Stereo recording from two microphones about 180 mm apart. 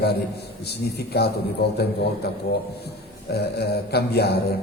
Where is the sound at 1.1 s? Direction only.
65° left (ahead or behind).